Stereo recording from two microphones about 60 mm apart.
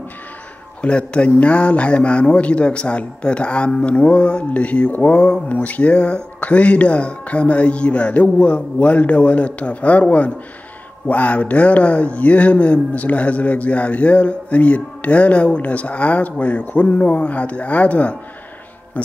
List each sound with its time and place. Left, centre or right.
0.8 s a man's voice: centre